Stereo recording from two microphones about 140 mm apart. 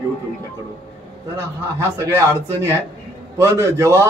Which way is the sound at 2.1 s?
20° right (ahead or behind).